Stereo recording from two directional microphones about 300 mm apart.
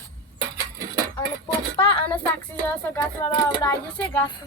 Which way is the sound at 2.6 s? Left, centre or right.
Centre.